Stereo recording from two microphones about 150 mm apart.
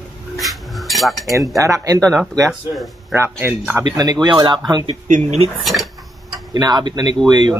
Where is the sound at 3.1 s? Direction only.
15° right (ahead or behind).